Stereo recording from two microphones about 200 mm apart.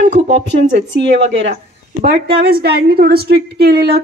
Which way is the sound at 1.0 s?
65° right (ahead or behind).